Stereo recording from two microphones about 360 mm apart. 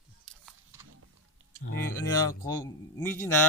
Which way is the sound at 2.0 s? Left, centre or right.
Centre.